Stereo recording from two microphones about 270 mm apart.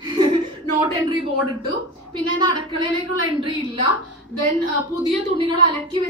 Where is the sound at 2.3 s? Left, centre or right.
Centre.